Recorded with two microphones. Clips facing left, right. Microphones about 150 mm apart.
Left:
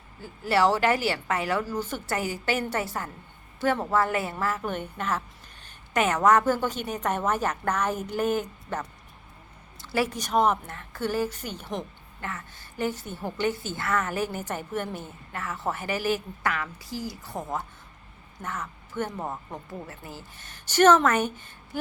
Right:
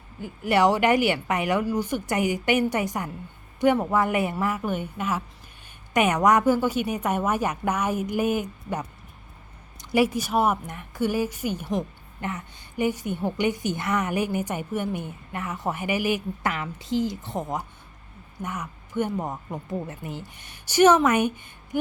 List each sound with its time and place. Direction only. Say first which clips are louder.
0.2 s a woman's voice: right 2 dB; 15° right (ahead or behind)
12.2 s a woman's voice: right 4 dB; 20° right (ahead or behind)